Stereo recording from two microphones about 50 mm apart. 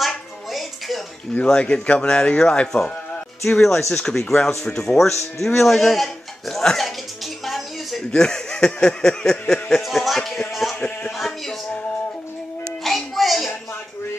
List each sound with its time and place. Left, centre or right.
0.5 s music: centre
1.4 s a man's voice: centre
7.4 s music: centre
8.1 s speech: centre
8.8 s a sound: centre
9.8 s a man's voice: centre
10.5 s a sound: centre
11.1 s music: centre
12.8 s a sound: centre